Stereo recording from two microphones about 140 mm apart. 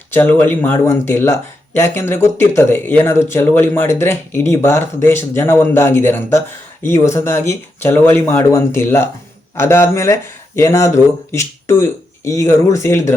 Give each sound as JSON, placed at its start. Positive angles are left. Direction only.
{"t": 0.1, "sound": "speech", "side_deg": 15}